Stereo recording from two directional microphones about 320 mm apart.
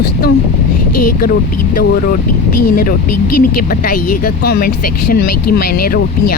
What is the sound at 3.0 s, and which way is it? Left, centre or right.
Speech, left.